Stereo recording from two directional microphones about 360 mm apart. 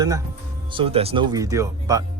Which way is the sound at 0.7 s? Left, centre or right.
Centre.